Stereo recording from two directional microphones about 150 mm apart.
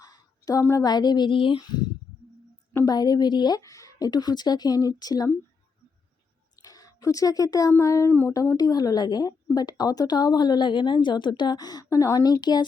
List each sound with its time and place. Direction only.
0.0 s speech: 25° left (ahead or behind)
6.6 s speech: 25° left (ahead or behind)